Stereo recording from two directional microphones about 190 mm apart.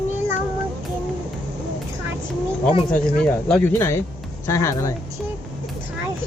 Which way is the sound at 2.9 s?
5° left (ahead or behind).